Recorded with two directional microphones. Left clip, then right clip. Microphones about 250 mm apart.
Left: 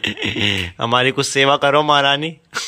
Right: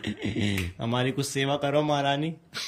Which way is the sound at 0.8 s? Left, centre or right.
Centre.